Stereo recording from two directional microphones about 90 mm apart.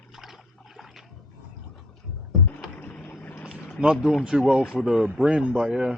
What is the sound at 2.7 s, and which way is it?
Boat, 15° left (ahead or behind).